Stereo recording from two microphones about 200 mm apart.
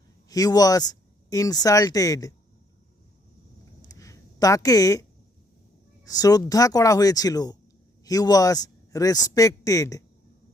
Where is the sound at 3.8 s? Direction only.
15° left (ahead or behind).